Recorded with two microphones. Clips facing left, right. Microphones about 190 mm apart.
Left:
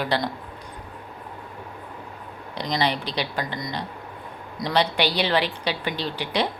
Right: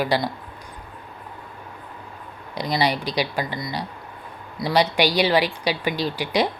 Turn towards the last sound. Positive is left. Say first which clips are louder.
# right 3 dB
turn(degrees=-10)  # may be behind; listen again after turning